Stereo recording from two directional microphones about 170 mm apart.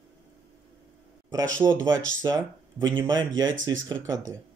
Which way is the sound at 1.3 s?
15° right (ahead or behind).